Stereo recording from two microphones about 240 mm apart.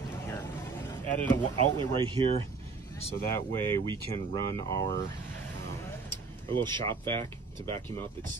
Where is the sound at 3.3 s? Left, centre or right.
Centre.